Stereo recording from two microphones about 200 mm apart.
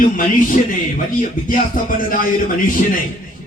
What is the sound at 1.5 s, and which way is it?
Speech, 45° left (ahead or behind).